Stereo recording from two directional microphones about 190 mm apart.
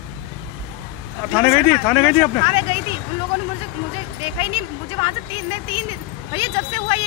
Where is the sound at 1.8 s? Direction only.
15° left (ahead or behind).